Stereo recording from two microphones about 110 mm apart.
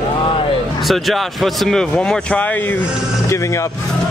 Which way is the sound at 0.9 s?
Centre (ahead or behind).